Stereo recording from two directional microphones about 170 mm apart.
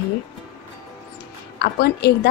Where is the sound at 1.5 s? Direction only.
75° left (ahead or behind).